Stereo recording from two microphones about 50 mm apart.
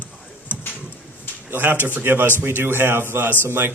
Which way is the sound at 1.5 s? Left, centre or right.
Right.